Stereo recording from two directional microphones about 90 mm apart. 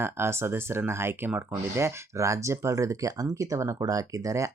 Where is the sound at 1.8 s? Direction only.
35° right (ahead or behind).